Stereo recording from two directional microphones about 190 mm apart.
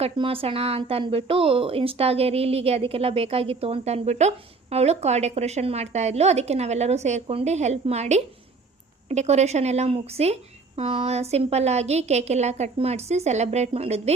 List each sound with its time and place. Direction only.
0.0 s speech: 30° right (ahead or behind)